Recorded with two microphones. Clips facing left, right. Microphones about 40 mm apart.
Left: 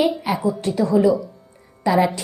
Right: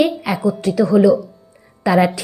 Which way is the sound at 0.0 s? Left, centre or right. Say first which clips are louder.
Right 3 dB; right.